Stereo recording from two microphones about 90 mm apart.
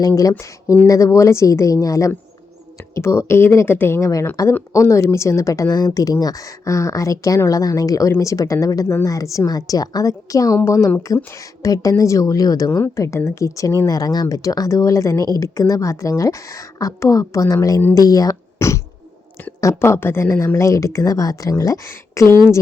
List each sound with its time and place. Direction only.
0.0 s a woman's voice: 40° left (ahead or behind)
4.4 s a woman's voice: 40° left (ahead or behind)
12.7 s a woman's voice: 30° left (ahead or behind)
20.6 s a woman's voice: 35° left (ahead or behind)